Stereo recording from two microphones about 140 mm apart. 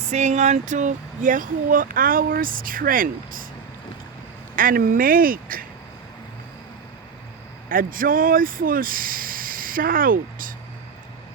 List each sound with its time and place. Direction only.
0.1 s speech: 55° right (ahead or behind); by 3.4 s 85° right
4.5 s speech: 85° right
7.7 s speech: 85° right